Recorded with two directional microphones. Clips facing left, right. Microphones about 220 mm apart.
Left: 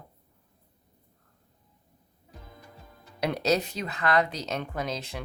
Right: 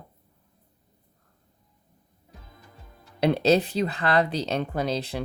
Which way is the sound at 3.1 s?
30° right (ahead or behind).